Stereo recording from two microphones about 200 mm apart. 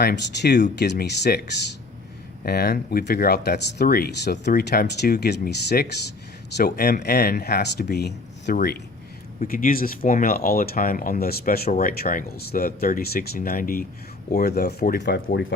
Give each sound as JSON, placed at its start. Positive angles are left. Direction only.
{"t": 0.0, "sound": "speech", "side_deg": 55}
{"t": 2.4, "sound": "speech", "side_deg": 50}